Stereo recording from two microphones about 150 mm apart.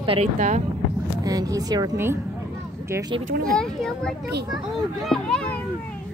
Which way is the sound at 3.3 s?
80° right.